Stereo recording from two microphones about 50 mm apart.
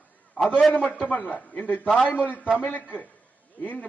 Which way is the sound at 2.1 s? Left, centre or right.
Left.